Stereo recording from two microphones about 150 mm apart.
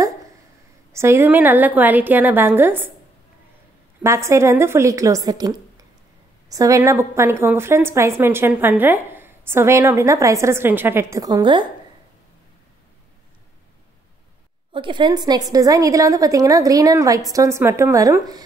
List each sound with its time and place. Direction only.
0.9 s a woman's voice: 15° right (ahead or behind)
4.0 s a woman's voice: 20° right (ahead or behind)
14.7 s a woman's voice: 30° right (ahead or behind)